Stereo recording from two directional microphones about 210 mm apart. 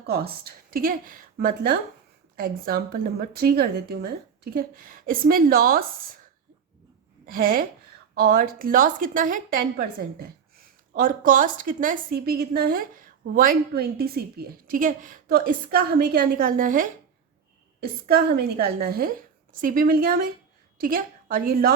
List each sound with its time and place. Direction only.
0.0 s a woman's voice: 45° right (ahead or behind)
7.3 s a woman's voice: 45° right (ahead or behind)
18.1 s a woman's voice: 50° right (ahead or behind)